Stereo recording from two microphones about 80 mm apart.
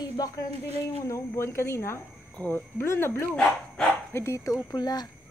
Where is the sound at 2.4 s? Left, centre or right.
Left.